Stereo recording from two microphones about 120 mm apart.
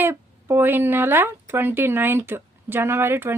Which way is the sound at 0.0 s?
20° right (ahead or behind).